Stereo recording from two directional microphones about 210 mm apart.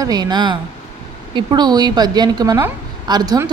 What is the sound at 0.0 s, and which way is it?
A woman's voice, 20° right (ahead or behind).